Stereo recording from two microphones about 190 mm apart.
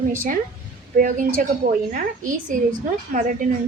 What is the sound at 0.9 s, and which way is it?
A woman's voice, 45° right (ahead or behind).